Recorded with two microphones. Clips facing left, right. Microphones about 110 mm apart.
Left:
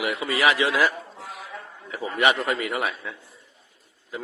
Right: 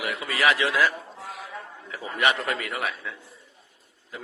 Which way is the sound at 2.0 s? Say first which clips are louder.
Left 3 dB; 15° left (ahead or behind).